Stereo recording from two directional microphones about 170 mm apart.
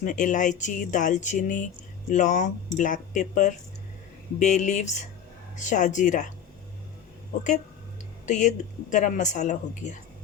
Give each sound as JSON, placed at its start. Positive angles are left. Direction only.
{"t": 0.0, "sound": "speech", "side_deg": 50}
{"t": 8.3, "sound": "speech", "side_deg": 45}